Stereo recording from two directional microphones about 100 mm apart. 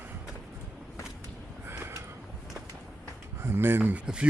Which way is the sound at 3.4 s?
25° right (ahead or behind).